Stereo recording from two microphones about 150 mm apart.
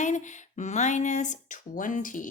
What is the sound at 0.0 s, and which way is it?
Speech, 55° left (ahead or behind).